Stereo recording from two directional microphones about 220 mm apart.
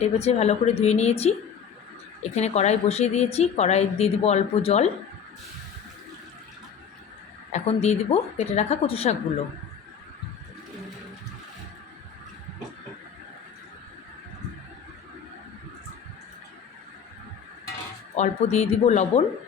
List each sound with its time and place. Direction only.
0.0 s a woman's voice: 30° left (ahead or behind)
7.5 s a woman's voice: 30° left (ahead or behind)
18.2 s a woman's voice: 30° left (ahead or behind)